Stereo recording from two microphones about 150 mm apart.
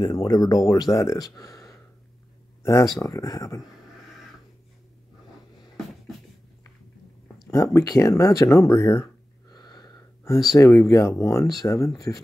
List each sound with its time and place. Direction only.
0.0 s speech: 25° left (ahead or behind)
7.5 s speech: 20° left (ahead or behind)
8.2 s gasp: 20° left (ahead or behind)
10.6 s speech: 15° left (ahead or behind)